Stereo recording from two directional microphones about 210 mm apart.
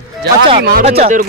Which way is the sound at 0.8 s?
30° right (ahead or behind).